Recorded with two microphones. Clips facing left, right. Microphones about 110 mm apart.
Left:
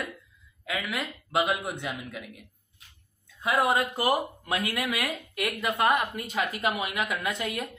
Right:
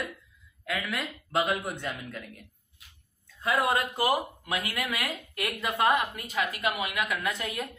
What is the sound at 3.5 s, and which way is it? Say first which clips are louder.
Speech: left 2 dB; 20° left (ahead or behind).